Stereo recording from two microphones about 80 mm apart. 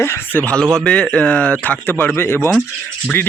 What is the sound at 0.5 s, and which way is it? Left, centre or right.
Speech, centre.